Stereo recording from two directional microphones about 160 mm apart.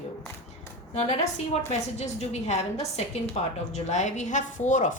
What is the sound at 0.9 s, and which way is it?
A woman's voice, 45° left (ahead or behind).